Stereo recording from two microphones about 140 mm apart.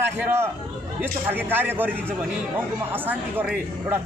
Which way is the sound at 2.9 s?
15° right (ahead or behind).